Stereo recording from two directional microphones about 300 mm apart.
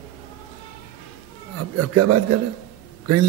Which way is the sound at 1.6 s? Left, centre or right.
Right.